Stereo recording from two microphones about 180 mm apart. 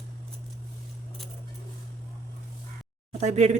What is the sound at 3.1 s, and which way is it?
Speech, 40° right (ahead or behind).